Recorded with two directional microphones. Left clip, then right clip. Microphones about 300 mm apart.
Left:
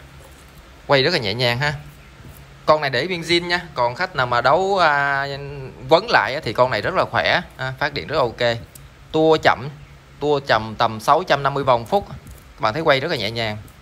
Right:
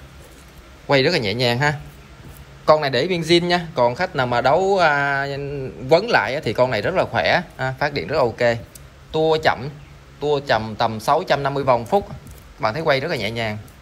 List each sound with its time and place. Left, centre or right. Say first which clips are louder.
0.8 s speech: even; centre
5.4 s a man's voice: right 6 dB; left
5.9 s speech: left 1 dB; centre